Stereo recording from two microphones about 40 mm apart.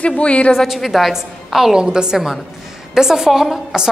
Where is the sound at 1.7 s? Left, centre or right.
Centre.